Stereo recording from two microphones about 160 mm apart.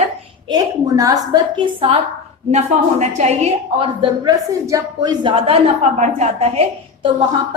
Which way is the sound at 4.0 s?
20° right (ahead or behind).